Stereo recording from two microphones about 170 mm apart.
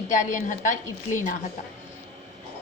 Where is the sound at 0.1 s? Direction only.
45° left (ahead or behind).